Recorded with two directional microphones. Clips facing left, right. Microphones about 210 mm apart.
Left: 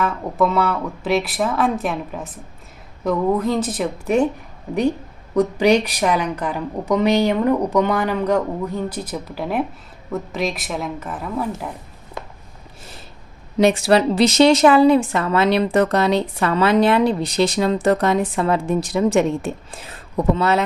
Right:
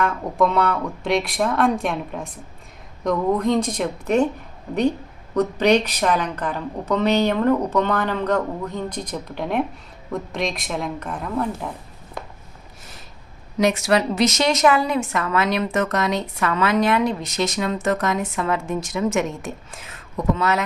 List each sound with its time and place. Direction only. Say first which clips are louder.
0.0 s speech: left 1 dB; 5° left (ahead or behind)
5.3 s speech: left 2 dB; 10° left (ahead or behind)
13.6 s a woman's voice: left 4 dB; 30° left (ahead or behind)